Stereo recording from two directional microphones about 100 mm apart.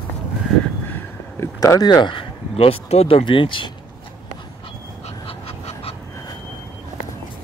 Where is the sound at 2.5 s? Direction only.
80° left.